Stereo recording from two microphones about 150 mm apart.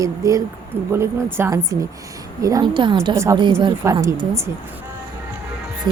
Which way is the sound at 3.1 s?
20° right (ahead or behind).